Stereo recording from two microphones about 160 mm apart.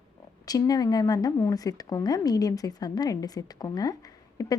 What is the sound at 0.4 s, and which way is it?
A woman's voice, 25° left (ahead or behind).